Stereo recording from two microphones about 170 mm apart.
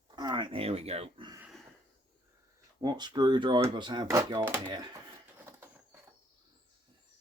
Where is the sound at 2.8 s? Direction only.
25° right (ahead or behind).